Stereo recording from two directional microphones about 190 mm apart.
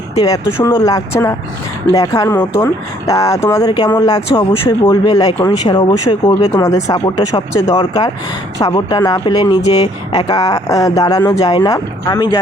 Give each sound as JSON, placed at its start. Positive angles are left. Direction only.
{"t": 0.1, "sound": "speech", "side_deg": 20}
{"t": 6.5, "sound": "speech", "side_deg": 15}